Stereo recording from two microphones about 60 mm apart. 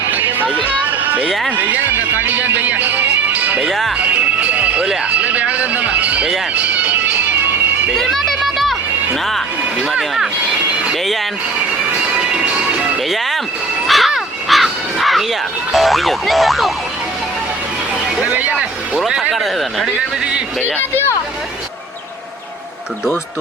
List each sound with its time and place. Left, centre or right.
0.5 s a sound: right
1.5 s speech: right
3.7 s speech: centre
3.9 s music: right
5.0 s speech: right
6.5 s music: right
7.9 s a sound: centre
13.8 s crow: centre
18.2 s vehicle: right
18.9 s speech: centre
20.6 s speech: left